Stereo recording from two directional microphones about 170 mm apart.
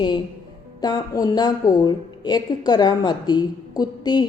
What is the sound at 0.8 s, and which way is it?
A woman's voice, 20° left (ahead or behind).